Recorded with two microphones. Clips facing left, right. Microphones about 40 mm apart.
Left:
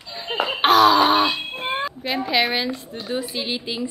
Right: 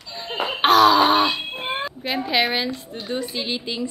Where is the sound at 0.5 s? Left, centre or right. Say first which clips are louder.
Even; centre.